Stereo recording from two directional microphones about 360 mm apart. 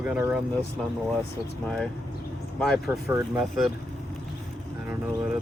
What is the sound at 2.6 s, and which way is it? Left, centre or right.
Speech, centre.